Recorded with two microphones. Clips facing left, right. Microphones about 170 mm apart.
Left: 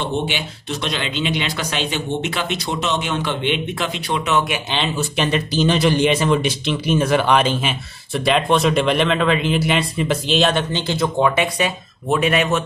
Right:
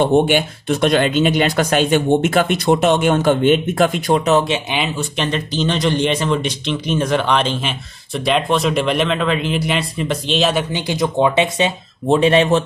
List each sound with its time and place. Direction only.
0.0 s speech: 50° right (ahead or behind)
4.8 s speech: 5° left (ahead or behind); by 12.6 s 30° right (ahead or behind)